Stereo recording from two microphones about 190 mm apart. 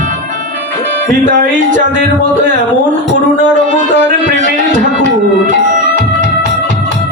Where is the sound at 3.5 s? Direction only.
40° right (ahead or behind).